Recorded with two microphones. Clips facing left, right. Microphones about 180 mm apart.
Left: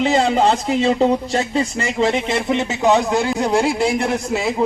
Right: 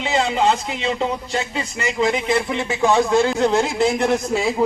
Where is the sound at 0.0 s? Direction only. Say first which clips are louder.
Left 4 dB; 40° left (ahead or behind); by 3.7 s 15° left (ahead or behind).